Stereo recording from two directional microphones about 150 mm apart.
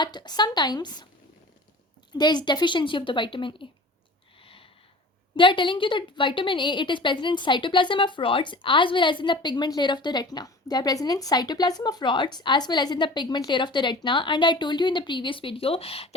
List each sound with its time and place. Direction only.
0.0 s a woman's voice: 30° left (ahead or behind)
2.1 s a woman's voice: 30° left (ahead or behind)
5.4 s a woman's voice: 35° left (ahead or behind)